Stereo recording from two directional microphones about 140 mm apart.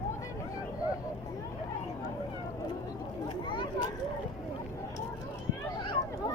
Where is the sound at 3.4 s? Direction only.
35° left (ahead or behind).